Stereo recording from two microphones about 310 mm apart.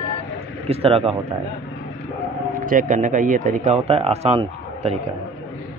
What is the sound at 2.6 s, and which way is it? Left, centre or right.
Speech, right.